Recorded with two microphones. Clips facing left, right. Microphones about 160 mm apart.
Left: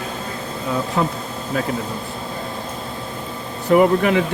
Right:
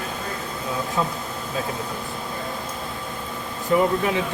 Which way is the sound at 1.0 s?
70° left (ahead or behind).